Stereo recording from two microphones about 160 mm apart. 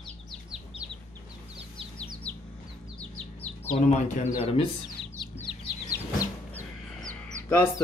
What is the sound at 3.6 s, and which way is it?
Speech, 40° left (ahead or behind).